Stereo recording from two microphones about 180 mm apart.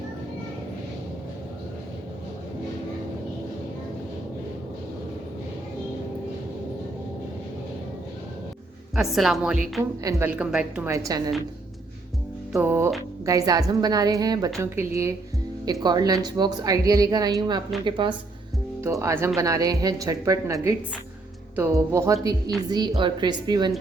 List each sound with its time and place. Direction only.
9.0 s a woman's voice: centre (ahead or behind)
10.0 s a woman's voice: 15° right (ahead or behind)
10.9 s a woman's voice: 20° right (ahead or behind)
12.5 s a woman's voice: 10° right (ahead or behind)
18.8 s a woman's voice: 15° right (ahead or behind)